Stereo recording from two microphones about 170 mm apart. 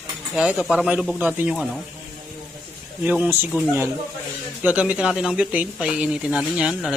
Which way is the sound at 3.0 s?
10° right (ahead or behind).